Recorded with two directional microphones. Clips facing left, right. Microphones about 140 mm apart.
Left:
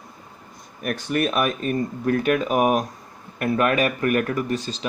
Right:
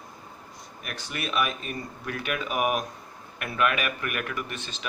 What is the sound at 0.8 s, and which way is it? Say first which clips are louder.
Speech: left 12 dB; 50° left (ahead or behind).